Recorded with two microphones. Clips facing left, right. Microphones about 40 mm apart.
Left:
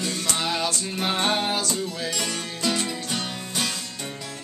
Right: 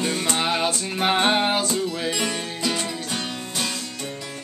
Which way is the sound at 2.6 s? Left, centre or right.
Centre.